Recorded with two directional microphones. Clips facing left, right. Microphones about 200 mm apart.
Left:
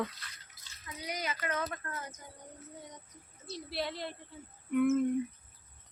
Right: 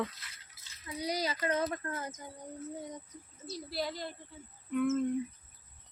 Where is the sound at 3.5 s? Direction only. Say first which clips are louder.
Even; centre (ahead or behind).